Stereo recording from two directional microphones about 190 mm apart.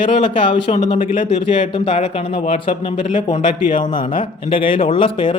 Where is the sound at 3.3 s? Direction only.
45° left (ahead or behind).